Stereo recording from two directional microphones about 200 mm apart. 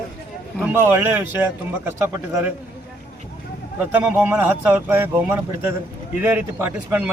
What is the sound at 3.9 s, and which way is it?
A man's voice, 10° right (ahead or behind).